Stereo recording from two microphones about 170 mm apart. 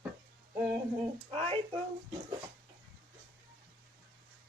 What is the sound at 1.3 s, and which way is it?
Speech, 35° right (ahead or behind).